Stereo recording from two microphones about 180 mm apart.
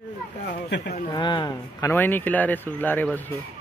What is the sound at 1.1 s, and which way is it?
Speech, 25° left (ahead or behind).